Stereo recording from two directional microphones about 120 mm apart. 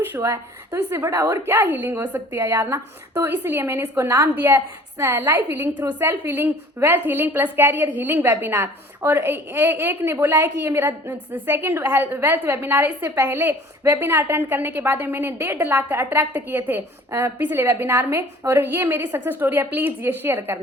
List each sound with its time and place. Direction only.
0.1 s a woman's voice: 25° right (ahead or behind)